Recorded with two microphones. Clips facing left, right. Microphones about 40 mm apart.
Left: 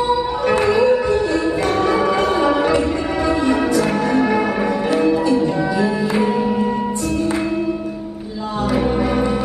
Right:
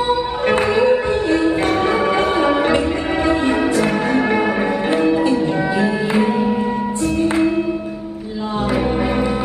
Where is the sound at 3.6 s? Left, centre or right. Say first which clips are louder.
Even; right.